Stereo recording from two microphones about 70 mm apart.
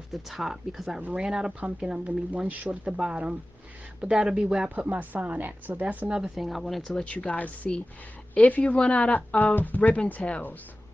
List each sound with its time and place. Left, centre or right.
0.1 s speech: centre
4.6 s a woman's voice: right; by 7.1 s centre
7.1 s speech: centre